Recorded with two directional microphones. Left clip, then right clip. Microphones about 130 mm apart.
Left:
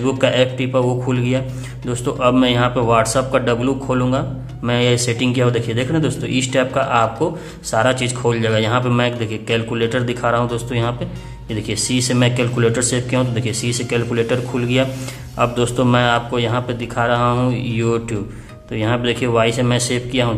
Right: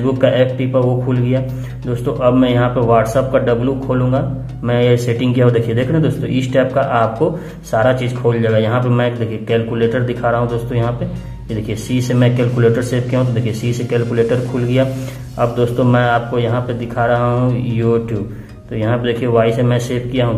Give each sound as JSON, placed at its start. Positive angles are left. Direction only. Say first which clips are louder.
{"t": 0.0, "sound": "a man's voice", "louder": "right 2 dB", "side_deg": 25}